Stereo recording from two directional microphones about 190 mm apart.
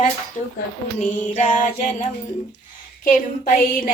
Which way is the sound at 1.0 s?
40° left (ahead or behind).